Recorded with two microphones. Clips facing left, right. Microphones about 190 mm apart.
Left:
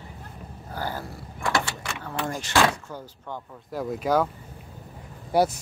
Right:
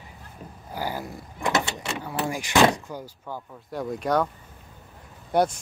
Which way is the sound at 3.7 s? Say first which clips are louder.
Left 1 dB; centre (ahead or behind).